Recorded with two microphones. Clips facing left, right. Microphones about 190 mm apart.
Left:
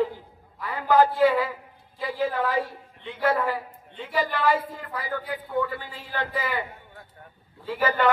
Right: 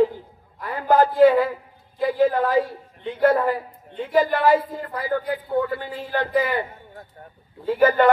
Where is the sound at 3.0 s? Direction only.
45° right (ahead or behind).